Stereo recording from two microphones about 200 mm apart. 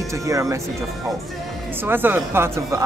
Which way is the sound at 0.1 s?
15° right (ahead or behind).